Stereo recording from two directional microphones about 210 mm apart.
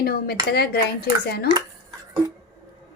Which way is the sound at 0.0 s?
50° left (ahead or behind).